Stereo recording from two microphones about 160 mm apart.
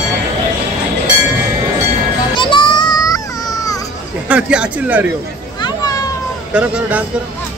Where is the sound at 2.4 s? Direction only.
30° left (ahead or behind).